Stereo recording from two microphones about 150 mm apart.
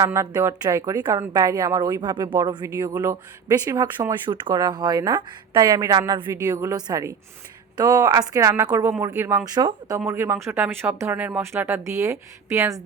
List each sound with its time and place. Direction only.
0.0 s a woman's voice: 20° right (ahead or behind)